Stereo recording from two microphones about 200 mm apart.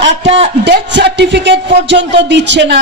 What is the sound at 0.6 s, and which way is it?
A man's voice, 60° right (ahead or behind).